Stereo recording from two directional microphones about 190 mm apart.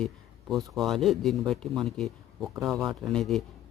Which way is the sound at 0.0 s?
Centre (ahead or behind).